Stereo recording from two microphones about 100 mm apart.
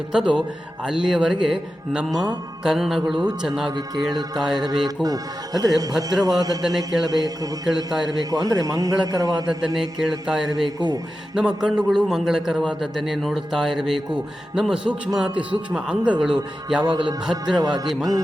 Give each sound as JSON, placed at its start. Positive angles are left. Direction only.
{"t": 0.1, "sound": "a man's voice", "side_deg": -10}
{"t": 2.1, "sound": "speech", "side_deg": -45}
{"t": 2.6, "sound": "a man's voice", "side_deg": 0}
{"t": 3.7, "sound": "a man's voice", "side_deg": -45}
{"t": 9.7, "sound": "a man's voice", "side_deg": -5}
{"t": 10.8, "sound": "speech", "side_deg": -40}
{"t": 11.3, "sound": "a man's voice", "side_deg": -5}
{"t": 16.8, "sound": "a man's voice", "side_deg": -45}